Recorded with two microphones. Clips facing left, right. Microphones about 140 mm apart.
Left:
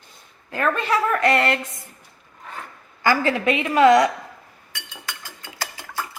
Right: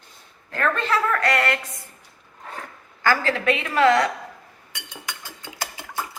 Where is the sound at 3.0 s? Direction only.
15° left (ahead or behind).